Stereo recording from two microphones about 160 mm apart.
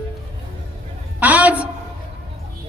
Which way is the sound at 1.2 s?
10° right (ahead or behind).